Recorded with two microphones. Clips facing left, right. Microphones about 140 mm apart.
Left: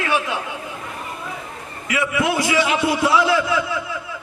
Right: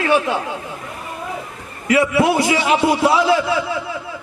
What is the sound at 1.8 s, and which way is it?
A man's voice, 35° right (ahead or behind).